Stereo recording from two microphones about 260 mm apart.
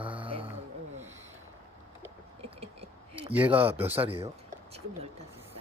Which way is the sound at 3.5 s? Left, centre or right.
Right.